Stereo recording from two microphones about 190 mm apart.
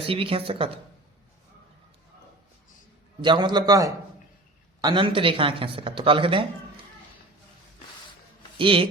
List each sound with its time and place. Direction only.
0.1 s a man's voice: 30° right (ahead or behind)
3.2 s a man's voice: 25° right (ahead or behind)
8.5 s speech: 25° right (ahead or behind)